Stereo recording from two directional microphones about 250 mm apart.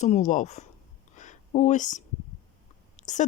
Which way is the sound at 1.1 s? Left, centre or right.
Left.